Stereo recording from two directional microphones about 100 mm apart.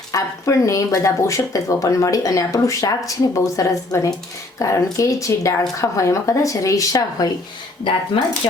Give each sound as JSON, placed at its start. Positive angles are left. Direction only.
{"t": 0.1, "sound": "speech", "side_deg": 30}